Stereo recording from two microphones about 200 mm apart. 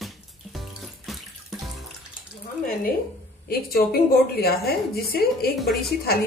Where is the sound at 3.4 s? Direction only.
50° left (ahead or behind).